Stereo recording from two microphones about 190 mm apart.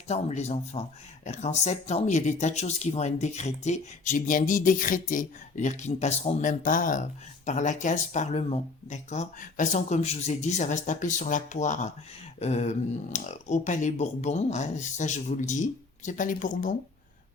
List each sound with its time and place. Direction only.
0.1 s speech: 35° left (ahead or behind)